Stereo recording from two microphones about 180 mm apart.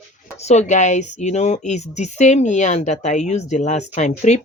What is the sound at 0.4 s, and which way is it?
Speech, 40° left (ahead or behind).